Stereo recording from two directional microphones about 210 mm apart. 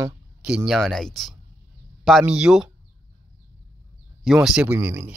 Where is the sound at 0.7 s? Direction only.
Centre (ahead or behind).